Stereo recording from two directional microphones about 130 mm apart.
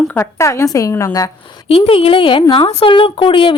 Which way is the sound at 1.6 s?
50° left (ahead or behind).